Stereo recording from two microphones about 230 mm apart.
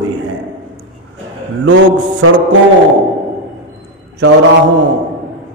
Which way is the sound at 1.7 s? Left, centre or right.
Right.